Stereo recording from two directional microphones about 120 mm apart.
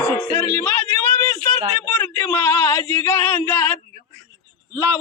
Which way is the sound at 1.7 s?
15° left (ahead or behind).